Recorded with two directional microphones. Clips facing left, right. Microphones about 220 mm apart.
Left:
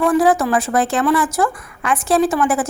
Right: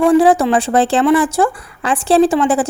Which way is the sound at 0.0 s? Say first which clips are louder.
Right 4 dB; 30° right (ahead or behind).